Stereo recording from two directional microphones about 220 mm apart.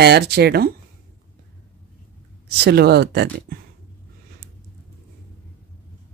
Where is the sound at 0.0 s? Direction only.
50° right (ahead or behind).